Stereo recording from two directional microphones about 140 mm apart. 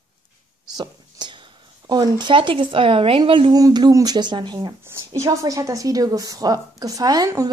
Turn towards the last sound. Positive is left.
turn(degrees=-25)  # may be behind; listen again after turning